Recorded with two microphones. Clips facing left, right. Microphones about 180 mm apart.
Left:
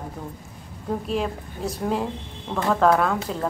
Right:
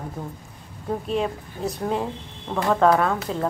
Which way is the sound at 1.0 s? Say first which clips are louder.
Right 1 dB; centre (ahead or behind).